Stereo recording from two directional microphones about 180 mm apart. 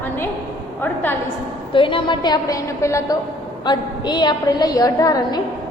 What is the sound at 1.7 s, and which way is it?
A woman's voice, 30° left (ahead or behind).